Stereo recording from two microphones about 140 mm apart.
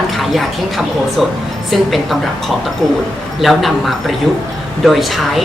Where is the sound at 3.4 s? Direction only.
Centre (ahead or behind).